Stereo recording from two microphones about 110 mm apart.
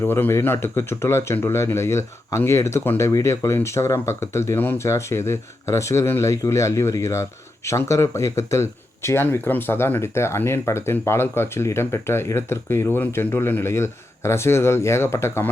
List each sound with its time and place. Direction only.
0.0 s speech: 20° left (ahead or behind)